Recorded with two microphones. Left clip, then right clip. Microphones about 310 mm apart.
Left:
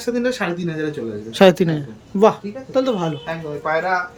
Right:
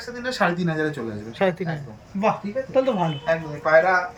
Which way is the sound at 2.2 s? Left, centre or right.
Centre.